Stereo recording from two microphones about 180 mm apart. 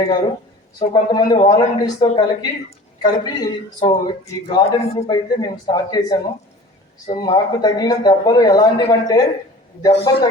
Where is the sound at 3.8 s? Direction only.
25° left (ahead or behind).